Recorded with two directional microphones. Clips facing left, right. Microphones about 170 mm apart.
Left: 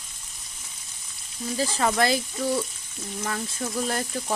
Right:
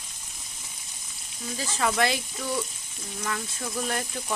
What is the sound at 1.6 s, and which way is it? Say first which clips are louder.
Speech: left 3 dB; 35° left (ahead or behind).